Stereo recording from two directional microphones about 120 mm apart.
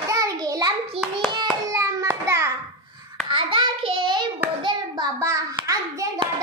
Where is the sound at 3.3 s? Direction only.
45° right (ahead or behind).